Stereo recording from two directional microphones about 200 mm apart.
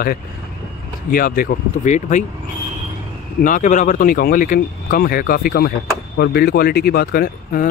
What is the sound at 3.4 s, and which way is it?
Speech, 40° left (ahead or behind).